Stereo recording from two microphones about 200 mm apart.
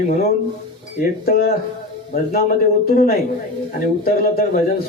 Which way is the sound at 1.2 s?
50° left (ahead or behind).